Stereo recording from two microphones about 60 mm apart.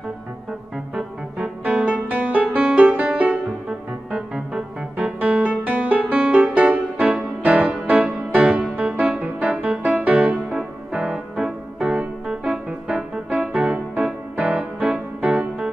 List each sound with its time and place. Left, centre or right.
1.6 s music: right
4.1 s piano: centre
7.9 s music: right
10.5 s keyboard: centre